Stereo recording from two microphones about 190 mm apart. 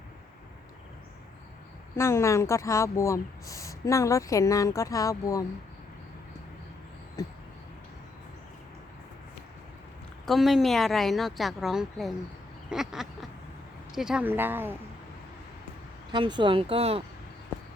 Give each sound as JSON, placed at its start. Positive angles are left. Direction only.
{"t": 2.0, "sound": "speech", "side_deg": 15}
{"t": 7.2, "sound": "a sound", "side_deg": 20}
{"t": 10.2, "sound": "a woman's voice", "side_deg": 0}
{"t": 16.1, "sound": "speech", "side_deg": -25}